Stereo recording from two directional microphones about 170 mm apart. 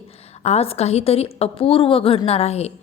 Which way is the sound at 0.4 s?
35° left (ahead or behind).